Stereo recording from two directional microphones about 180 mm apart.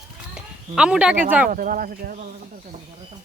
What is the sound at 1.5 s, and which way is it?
Speech, 50° right (ahead or behind).